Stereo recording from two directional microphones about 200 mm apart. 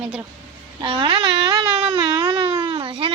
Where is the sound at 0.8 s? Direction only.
25° right (ahead or behind).